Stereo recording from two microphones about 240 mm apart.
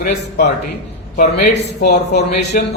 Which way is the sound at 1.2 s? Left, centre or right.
Left.